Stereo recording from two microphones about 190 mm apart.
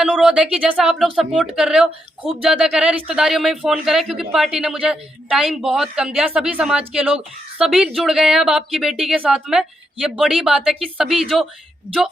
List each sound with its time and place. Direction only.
0.0 s speech: 5° right (ahead or behind)